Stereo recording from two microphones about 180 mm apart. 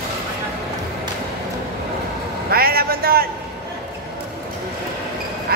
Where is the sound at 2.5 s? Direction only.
55° right (ahead or behind).